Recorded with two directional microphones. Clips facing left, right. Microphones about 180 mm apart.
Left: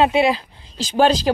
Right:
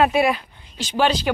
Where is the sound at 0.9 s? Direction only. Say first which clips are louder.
Left 4 dB; 40° left (ahead or behind).